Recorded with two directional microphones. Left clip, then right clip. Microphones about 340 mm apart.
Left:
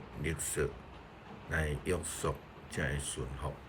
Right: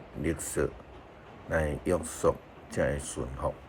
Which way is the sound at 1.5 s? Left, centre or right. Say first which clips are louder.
Right 6 dB; centre.